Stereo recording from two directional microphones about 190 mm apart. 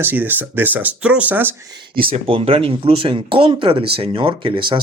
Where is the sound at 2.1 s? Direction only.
30° right (ahead or behind).